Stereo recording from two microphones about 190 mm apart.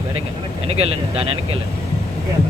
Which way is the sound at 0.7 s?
30° right (ahead or behind).